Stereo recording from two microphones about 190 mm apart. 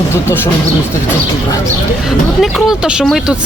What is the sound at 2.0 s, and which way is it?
Speech, centre (ahead or behind).